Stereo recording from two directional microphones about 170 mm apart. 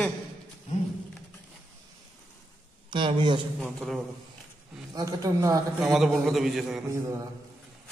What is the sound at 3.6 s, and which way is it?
Speech, centre (ahead or behind).